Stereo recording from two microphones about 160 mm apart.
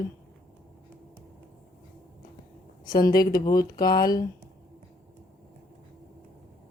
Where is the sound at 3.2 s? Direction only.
20° left (ahead or behind).